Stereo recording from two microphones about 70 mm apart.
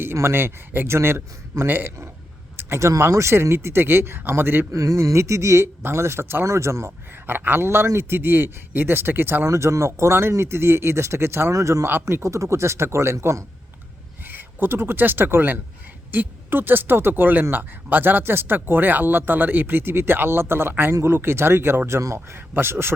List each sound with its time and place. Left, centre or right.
0.0 s speech: right
2.6 s a sound: right
3.1 s speech: right
4.7 s speech: right
6.4 s speech: right
9.5 s speech: right
11.9 s speech: right
14.3 s speech: right